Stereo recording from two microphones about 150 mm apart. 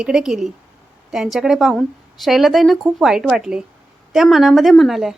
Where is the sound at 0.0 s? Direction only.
5° right (ahead or behind).